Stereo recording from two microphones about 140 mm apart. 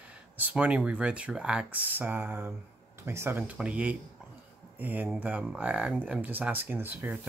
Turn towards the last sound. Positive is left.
turn(degrees=-15)  # may be behind; listen again after turning